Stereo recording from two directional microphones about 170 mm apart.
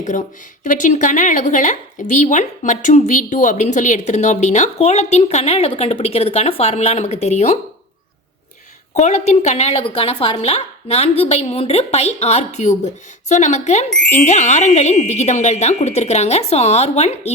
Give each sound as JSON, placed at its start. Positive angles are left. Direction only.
{"t": 0.0, "sound": "speech", "side_deg": 50}
{"t": 9.0, "sound": "speech", "side_deg": 45}